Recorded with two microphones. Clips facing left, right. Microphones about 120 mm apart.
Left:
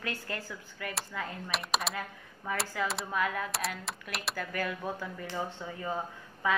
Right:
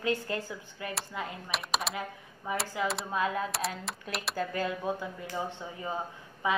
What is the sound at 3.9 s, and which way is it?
Speech, centre (ahead or behind).